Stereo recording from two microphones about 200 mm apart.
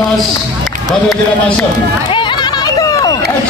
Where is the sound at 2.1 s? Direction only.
25° left (ahead or behind).